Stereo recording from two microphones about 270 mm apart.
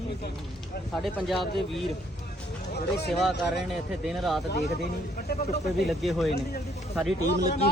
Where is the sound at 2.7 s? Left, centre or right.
Left.